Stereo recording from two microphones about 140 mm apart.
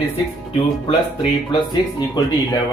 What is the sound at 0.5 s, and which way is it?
Speech, 40° left (ahead or behind).